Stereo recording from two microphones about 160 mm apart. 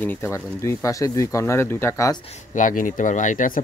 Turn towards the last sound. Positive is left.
turn(degrees=55)  # may be behind; listen again after turning